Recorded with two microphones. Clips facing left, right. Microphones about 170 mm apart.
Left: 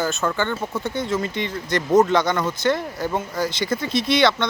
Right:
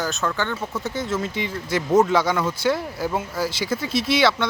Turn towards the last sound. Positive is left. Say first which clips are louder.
# left 1 dB
turn(degrees=-5)  # may be behind; listen again after turning